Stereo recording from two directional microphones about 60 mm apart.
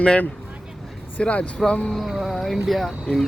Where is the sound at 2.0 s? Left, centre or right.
Centre.